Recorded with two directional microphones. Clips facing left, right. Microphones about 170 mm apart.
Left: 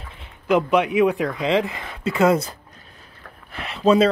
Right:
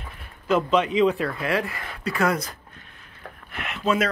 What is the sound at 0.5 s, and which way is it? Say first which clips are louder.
Speech: left 3 dB; 15° left (ahead or behind).